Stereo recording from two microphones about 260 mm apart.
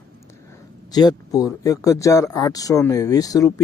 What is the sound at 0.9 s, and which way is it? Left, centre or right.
Speech, centre.